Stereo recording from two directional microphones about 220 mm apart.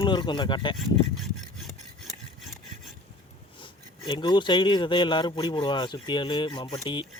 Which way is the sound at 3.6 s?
20° left (ahead or behind).